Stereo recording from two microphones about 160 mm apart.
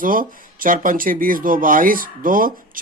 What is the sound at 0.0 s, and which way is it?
Speech, 60° right (ahead or behind).